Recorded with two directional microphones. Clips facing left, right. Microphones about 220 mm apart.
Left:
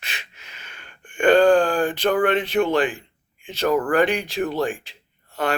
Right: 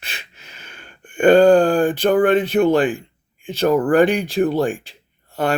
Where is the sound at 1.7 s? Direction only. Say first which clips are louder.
Right 5 dB; 45° right (ahead or behind).